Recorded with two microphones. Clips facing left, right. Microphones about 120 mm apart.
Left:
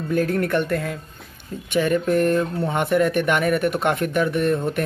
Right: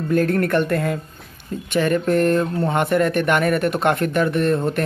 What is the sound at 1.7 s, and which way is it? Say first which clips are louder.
Speech: right 1 dB; 15° left (ahead or behind).